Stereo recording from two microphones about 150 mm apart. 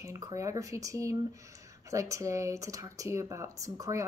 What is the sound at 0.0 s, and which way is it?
Speech, 20° right (ahead or behind).